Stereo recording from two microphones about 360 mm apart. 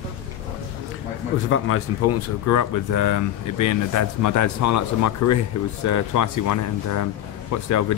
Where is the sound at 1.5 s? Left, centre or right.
Left.